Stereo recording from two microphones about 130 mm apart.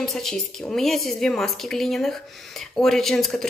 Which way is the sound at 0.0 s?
5° left (ahead or behind).